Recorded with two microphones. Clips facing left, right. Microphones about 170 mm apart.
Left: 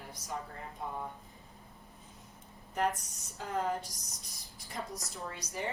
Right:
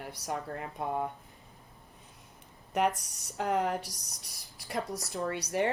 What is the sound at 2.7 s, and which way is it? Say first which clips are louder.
Speech: right 4 dB; 70° right (ahead or behind).